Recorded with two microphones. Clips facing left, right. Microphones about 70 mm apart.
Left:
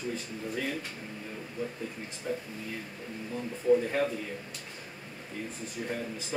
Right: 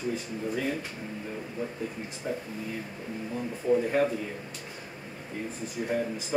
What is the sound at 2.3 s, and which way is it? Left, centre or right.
Speech, centre.